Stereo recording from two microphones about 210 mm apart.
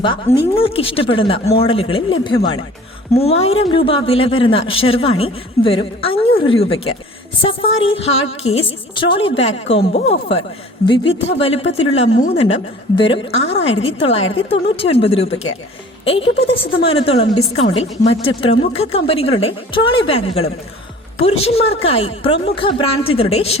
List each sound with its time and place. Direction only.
0.5 s a woman's voice: 25° left (ahead or behind)